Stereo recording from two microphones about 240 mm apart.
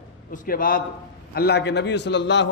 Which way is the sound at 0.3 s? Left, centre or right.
Left.